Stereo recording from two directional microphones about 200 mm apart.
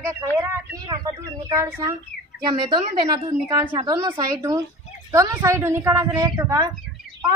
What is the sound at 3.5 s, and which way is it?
A woman's voice, 15° right (ahead or behind).